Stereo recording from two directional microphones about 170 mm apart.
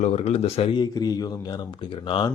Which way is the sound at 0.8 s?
25° left (ahead or behind).